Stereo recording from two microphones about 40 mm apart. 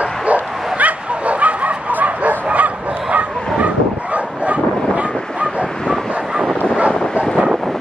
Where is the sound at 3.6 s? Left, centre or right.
Right.